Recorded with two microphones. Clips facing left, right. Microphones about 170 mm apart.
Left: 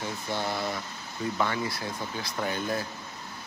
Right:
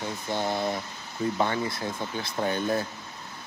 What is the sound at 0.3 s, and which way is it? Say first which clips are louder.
Speech: right 4 dB; 20° right (ahead or behind).